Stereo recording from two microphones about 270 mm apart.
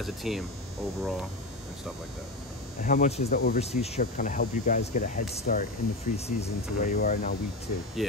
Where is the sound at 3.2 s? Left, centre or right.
Left.